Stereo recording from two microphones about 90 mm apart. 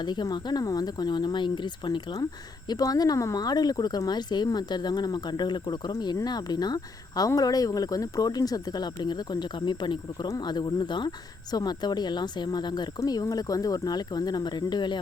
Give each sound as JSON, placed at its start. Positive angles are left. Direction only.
{"t": 0.0, "sound": "speech", "side_deg": 55}
{"t": 2.6, "sound": "speech", "side_deg": 45}
{"t": 13.0, "sound": "speech", "side_deg": 45}